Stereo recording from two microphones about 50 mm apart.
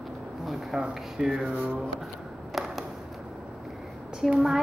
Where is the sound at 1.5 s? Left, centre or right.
Right.